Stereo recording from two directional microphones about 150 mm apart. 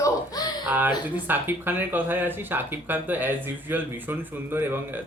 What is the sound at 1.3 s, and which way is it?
Speech, 15° right (ahead or behind).